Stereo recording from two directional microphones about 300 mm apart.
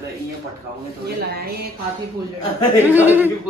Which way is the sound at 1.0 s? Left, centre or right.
Right.